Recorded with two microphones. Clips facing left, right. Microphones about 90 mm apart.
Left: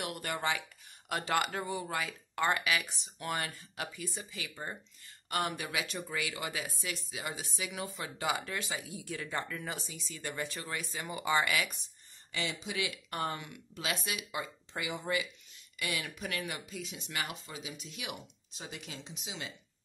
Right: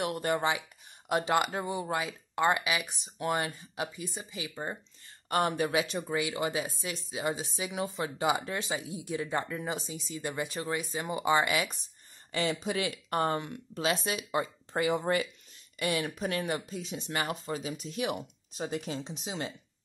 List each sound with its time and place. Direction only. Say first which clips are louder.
0.0 s speech: right 6 dB; 25° right (ahead or behind)
5.3 s speech: right 7 dB; 30° right (ahead or behind)
12.3 s speech: right 7 dB; 40° right (ahead or behind)
15.8 s speech: right 7 dB; 35° right (ahead or behind)